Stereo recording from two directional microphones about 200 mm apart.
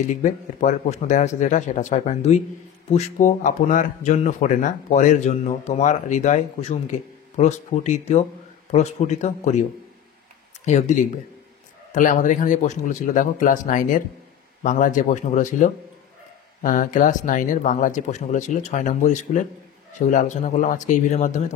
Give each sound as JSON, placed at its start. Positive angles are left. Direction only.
{"t": 0.1, "sound": "speech", "side_deg": 40}
{"t": 10.6, "sound": "speech", "side_deg": 35}